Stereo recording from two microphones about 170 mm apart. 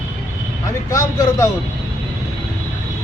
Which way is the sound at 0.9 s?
20° left (ahead or behind).